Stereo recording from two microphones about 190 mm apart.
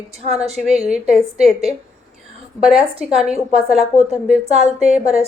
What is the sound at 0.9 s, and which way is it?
Speech, centre (ahead or behind).